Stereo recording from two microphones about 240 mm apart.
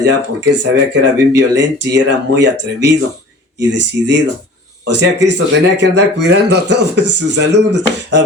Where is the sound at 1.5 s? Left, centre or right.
Right.